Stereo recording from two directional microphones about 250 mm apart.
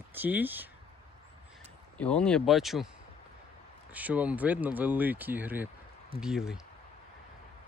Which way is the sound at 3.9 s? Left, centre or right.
Centre.